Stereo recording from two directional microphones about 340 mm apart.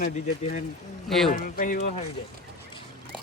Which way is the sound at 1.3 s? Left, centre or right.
Left.